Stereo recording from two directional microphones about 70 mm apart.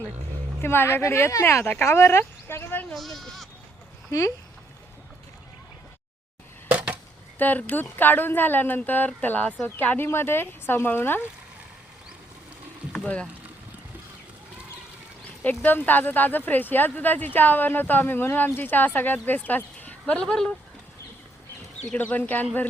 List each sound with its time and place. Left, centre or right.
0.6 s speech: left
2.9 s speech: centre
6.7 s a sound: right
7.3 s speech: left
15.4 s speech: left
21.9 s speech: left